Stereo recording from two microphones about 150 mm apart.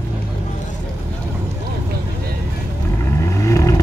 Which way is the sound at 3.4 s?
20° left (ahead or behind).